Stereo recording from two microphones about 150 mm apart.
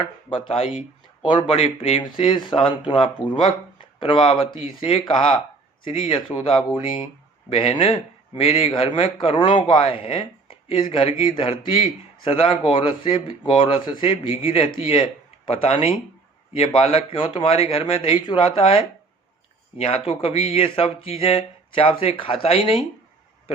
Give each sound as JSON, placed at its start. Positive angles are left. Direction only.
{"t": 0.0, "sound": "speech", "side_deg": 35}
{"t": 19.8, "sound": "speech", "side_deg": 40}